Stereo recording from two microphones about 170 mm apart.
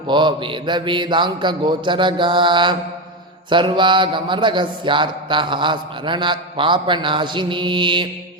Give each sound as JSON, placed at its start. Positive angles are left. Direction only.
{"t": 0.1, "sound": "mantra", "side_deg": -25}